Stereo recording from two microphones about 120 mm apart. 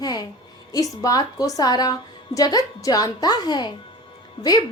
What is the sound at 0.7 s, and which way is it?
A woman's voice, 30° left (ahead or behind).